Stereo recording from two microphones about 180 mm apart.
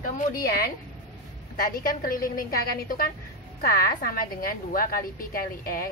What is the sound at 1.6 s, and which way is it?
A woman's voice, 55° left (ahead or behind).